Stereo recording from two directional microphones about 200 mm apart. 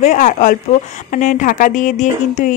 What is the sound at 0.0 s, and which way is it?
Speech, 40° left (ahead or behind).